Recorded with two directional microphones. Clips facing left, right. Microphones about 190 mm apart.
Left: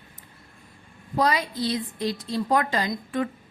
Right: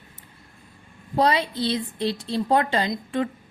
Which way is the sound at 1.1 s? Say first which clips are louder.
Right 2 dB; 30° right (ahead or behind).